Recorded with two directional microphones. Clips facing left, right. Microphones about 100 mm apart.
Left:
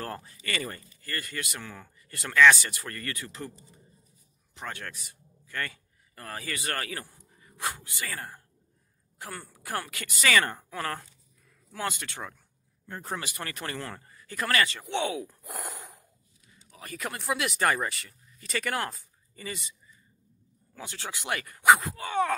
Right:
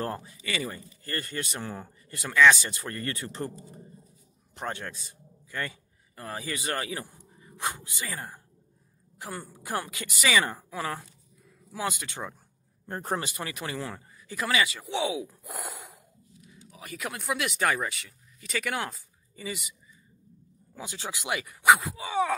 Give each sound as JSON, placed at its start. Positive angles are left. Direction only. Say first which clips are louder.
{"t": 0.2, "sound": "speech", "louder": "right 1 dB", "side_deg": -10}
{"t": 1.0, "sound": "speech", "louder": "right 2 dB", "side_deg": -30}
{"t": 2.0, "sound": "speech", "louder": "even", "side_deg": -15}
{"t": 2.6, "sound": "speech", "louder": "right 3 dB", "side_deg": -25}
{"t": 4.6, "sound": "a man's voice", "louder": "right 4 dB", "side_deg": -25}
{"t": 12.8, "sound": "speech", "louder": "right 5 dB", "side_deg": -45}
{"t": 13.4, "sound": "speech", "louder": "right 2 dB", "side_deg": -10}
{"t": 20.7, "sound": "speech", "louder": "right 2 dB", "side_deg": -15}